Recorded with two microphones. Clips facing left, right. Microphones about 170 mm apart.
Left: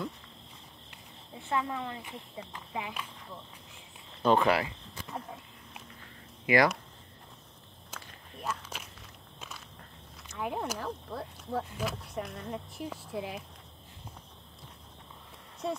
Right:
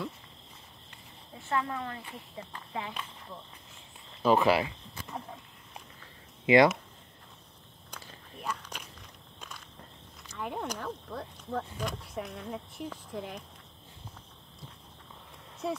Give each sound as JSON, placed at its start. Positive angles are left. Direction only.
{"t": 1.5, "sound": "speech", "side_deg": 15}
{"t": 4.2, "sound": "speech", "side_deg": -5}
{"t": 5.0, "sound": "cricket", "side_deg": 0}
{"t": 6.4, "sound": "speech", "side_deg": -25}
{"t": 7.9, "sound": "biting", "side_deg": 5}
{"t": 10.3, "sound": "speech", "side_deg": 5}
{"t": 15.6, "sound": "speech", "side_deg": -5}